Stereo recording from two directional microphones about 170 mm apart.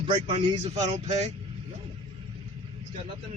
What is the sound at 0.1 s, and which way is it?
Speech, 30° right (ahead or behind).